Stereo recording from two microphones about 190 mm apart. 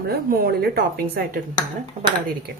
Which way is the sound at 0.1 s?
50° right (ahead or behind).